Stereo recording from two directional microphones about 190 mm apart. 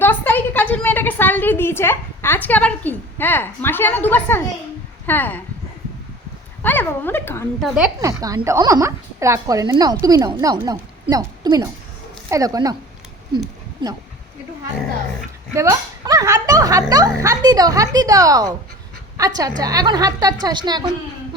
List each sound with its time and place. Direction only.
0.0 s a woman's voice: 10° left (ahead or behind)
6.6 s speech: 10° left (ahead or behind)
8.2 s a woman's voice: 20° right (ahead or behind)
13.8 s a woman's voice: 25° right (ahead or behind)
15.5 s a woman's voice: 15° right (ahead or behind)